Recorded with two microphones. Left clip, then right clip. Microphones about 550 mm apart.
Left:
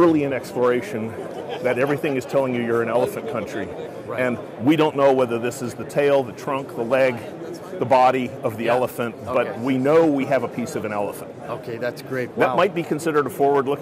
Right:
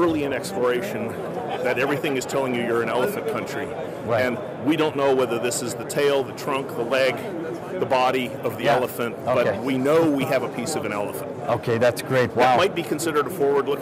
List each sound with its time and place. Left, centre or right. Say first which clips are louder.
0.0 s a man's voice: left 4 dB; left
11.4 s a man's voice: right 7 dB; right
12.5 s a man's voice: left 1 dB; left